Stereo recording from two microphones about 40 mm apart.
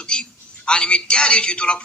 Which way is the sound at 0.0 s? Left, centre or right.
Left.